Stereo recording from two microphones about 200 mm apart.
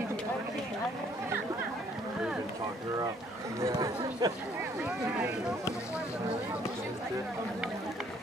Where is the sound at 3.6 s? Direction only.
15° right (ahead or behind).